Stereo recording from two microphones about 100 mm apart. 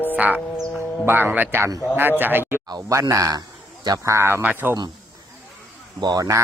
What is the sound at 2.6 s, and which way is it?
A man's voice, 45° right (ahead or behind).